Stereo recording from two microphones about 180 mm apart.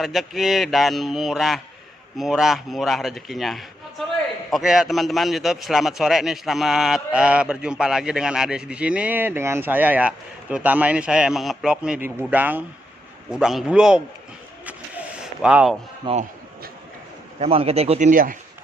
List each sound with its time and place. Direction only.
0.0 s a man's voice: centre (ahead or behind)
14.6 s vehicle: 10° right (ahead or behind)
16.1 s a man's voice: 30° right (ahead or behind)
17.4 s speech: 35° right (ahead or behind); by 18.3 s 50° right (ahead or behind)